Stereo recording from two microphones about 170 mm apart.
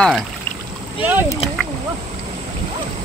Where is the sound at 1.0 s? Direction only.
10° right (ahead or behind).